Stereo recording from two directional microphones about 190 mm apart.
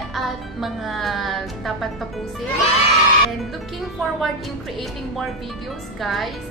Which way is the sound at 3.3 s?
Centre (ahead or behind).